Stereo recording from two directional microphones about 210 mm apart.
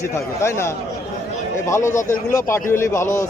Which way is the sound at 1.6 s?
15° left (ahead or behind).